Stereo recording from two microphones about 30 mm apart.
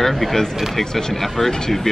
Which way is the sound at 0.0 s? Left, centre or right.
Centre.